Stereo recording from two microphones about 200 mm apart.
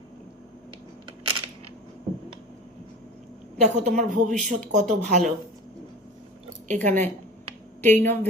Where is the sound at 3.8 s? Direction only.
40° right (ahead or behind).